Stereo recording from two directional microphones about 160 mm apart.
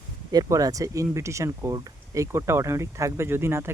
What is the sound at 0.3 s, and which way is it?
Speech, 20° right (ahead or behind).